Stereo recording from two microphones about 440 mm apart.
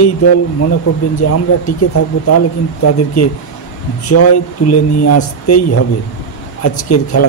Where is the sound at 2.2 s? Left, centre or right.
Left.